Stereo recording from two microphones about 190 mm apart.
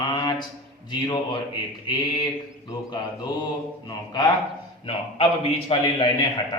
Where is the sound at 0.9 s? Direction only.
25° left (ahead or behind).